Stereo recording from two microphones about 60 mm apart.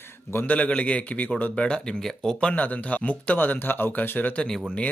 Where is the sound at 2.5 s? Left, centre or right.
Left.